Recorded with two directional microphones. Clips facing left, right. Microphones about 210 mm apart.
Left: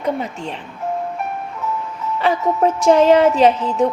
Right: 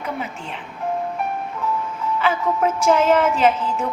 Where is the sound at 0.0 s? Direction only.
35° left (ahead or behind).